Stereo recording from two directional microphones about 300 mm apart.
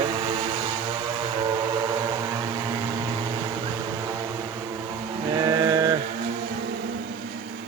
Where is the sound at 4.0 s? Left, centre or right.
Centre.